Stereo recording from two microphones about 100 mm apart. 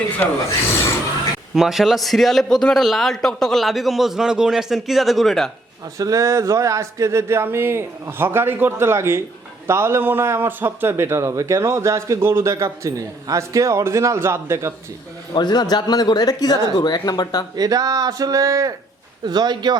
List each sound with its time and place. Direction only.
1.5 s a man's voice: centre (ahead or behind)
6.0 s a man's voice: 35° right (ahead or behind)
15.4 s a man's voice: 45° left (ahead or behind)
17.6 s speech: 40° right (ahead or behind)
19.2 s speech: 45° right (ahead or behind)